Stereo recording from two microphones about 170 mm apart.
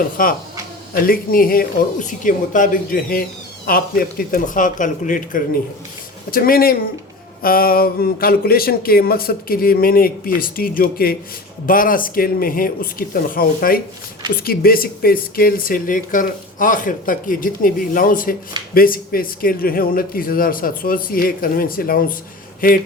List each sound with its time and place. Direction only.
0.2 s speech: 55° left (ahead or behind)